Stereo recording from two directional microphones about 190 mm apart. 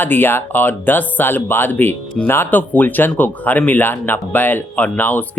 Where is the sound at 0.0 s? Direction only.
10° left (ahead or behind).